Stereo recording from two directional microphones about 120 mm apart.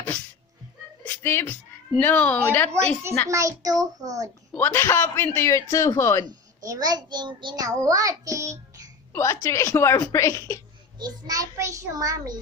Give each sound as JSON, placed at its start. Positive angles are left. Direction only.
{"t": 1.0, "sound": "a woman's voice", "side_deg": 15}
{"t": 3.2, "sound": "a child's voice", "side_deg": -25}
{"t": 4.5, "sound": "a man's voice", "side_deg": 15}
{"t": 6.2, "sound": "a child's voice", "side_deg": -35}
{"t": 9.1, "sound": "a man's voice", "side_deg": 25}
{"t": 11.0, "sound": "a child's voice", "side_deg": -30}